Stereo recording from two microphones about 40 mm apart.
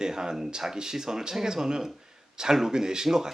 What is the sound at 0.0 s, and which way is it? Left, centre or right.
Speech, centre.